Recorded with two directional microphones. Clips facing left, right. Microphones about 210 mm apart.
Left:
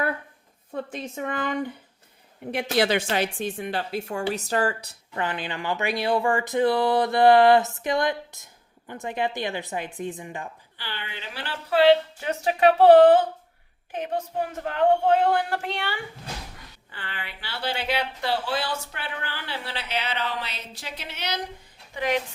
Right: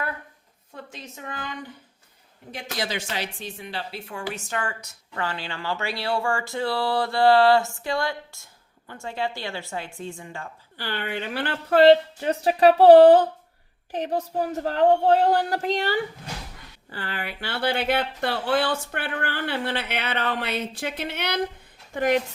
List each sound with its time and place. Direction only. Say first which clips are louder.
0.7 s a woman's voice: left 8 dB; 55° left (ahead or behind); by 4.9 s 35° left (ahead or behind)
5.1 s speech: left 2 dB; 20° left (ahead or behind)
10.8 s speech: right 9 dB; 50° right (ahead or behind)
21.9 s a woman's voice: right 4 dB; 45° right (ahead or behind)